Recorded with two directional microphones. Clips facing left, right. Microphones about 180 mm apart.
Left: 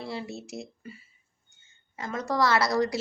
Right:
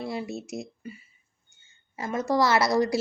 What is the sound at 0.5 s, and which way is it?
Speech, 15° right (ahead or behind).